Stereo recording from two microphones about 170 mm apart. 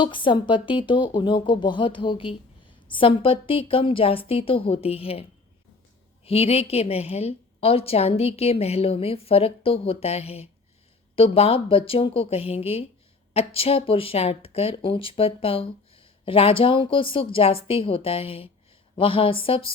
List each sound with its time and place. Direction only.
0.0 s a woman's voice: 30° left (ahead or behind)
6.2 s a woman's voice: 35° left (ahead or behind)